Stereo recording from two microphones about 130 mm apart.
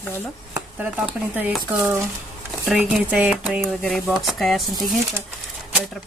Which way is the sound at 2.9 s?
10° right (ahead or behind).